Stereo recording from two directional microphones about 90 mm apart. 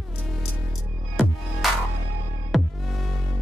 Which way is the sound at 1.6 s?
Centre (ahead or behind).